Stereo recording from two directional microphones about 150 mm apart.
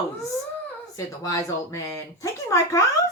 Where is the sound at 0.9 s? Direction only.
20° left (ahead or behind).